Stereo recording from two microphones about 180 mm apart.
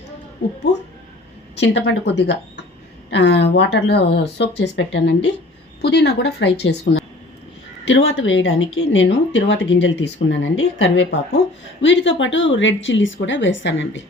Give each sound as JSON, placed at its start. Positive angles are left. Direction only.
{"t": 1.5, "sound": "speech", "side_deg": 75}
{"t": 5.8, "sound": "speech", "side_deg": 70}
{"t": 7.9, "sound": "a woman's voice", "side_deg": 90}